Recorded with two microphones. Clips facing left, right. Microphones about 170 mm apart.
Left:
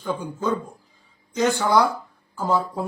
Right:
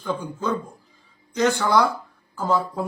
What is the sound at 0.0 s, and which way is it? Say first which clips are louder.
Speech: left 1 dB; 10° left (ahead or behind).